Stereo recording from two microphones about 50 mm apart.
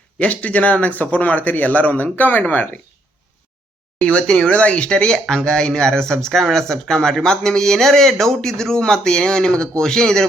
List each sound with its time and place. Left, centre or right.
0.2 s speech: left
4.0 s speech: centre